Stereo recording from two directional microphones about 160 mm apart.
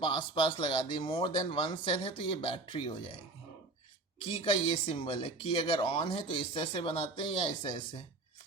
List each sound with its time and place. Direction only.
0.0 s speech: 30° left (ahead or behind)
4.4 s speech: 35° left (ahead or behind)